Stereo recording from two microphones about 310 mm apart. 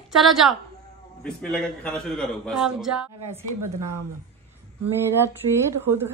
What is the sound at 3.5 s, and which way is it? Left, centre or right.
Speech, right.